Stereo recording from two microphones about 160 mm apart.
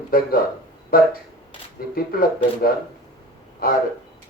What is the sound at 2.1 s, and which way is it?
Speech, 65° left (ahead or behind).